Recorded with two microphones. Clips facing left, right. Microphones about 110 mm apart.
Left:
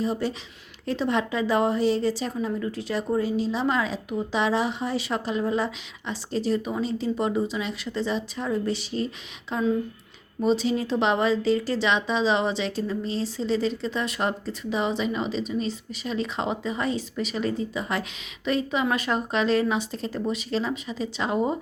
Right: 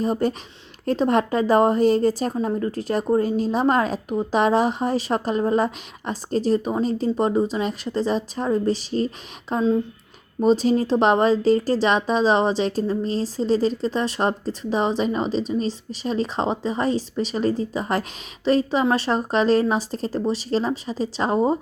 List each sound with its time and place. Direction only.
0.0 s a woman's voice: 45° right (ahead or behind)